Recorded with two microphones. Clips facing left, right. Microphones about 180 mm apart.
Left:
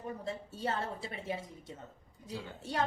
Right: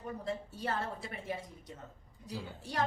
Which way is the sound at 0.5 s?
25° left (ahead or behind).